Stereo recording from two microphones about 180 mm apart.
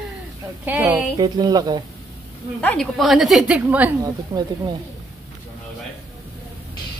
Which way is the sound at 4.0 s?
25° right (ahead or behind).